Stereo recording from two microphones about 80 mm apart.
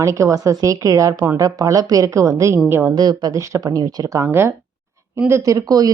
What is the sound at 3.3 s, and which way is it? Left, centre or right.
A woman's voice, right.